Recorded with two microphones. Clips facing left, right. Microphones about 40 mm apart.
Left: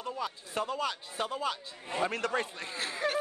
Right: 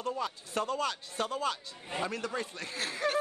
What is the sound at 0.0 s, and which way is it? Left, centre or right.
Speech, centre.